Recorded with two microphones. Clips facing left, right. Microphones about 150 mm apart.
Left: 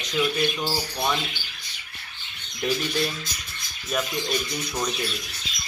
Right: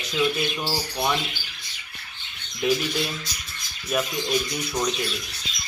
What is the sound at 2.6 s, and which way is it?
Speech, 5° right (ahead or behind).